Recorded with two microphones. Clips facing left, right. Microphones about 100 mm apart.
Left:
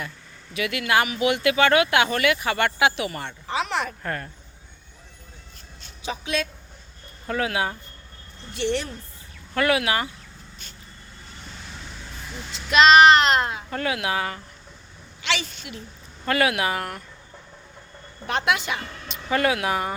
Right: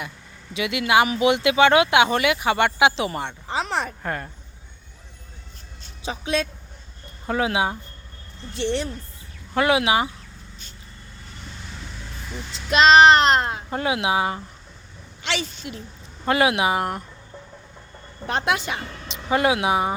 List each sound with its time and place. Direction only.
0.5 s speech: 20° right (ahead or behind)
1.0 s speech: 30° right (ahead or behind)
3.5 s a sound: 30° right (ahead or behind)
4.0 s speech: 15° right (ahead or behind)
6.1 s a child's voice: 30° right (ahead or behind)
12.7 s a child's voice: 30° right (ahead or behind)
13.7 s speech: 20° right (ahead or behind)
15.2 s a child's voice: 40° right (ahead or behind)
16.2 s speech: 20° right (ahead or behind)
18.3 s a child's voice: 30° right (ahead or behind)
19.3 s speech: 20° right (ahead or behind)